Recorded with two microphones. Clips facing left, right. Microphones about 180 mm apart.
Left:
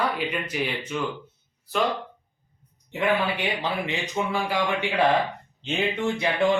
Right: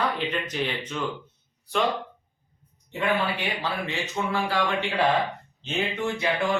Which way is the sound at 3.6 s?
15° left (ahead or behind).